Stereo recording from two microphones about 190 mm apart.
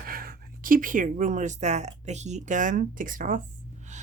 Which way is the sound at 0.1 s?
50° right (ahead or behind).